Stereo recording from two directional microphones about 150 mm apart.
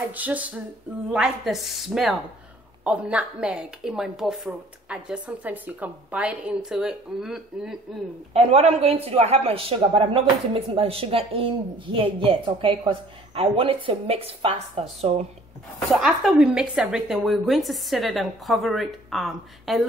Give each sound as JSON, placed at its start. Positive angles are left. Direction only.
{"t": 0.1, "sound": "a woman's voice", "side_deg": -10}
{"t": 8.3, "sound": "speech", "side_deg": -45}
{"t": 15.9, "sound": "a woman's voice", "side_deg": -5}